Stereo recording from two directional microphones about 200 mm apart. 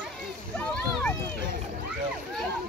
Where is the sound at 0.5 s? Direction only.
5° left (ahead or behind).